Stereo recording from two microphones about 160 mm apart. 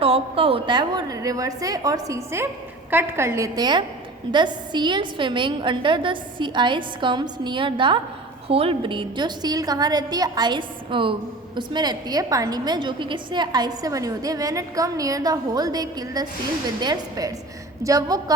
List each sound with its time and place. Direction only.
0.0 s a woman's voice: 35° right (ahead or behind)